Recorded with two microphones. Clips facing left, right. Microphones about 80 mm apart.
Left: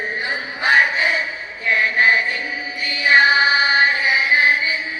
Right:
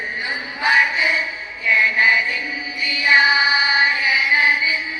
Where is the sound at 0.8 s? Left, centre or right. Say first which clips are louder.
Left 1 dB; left.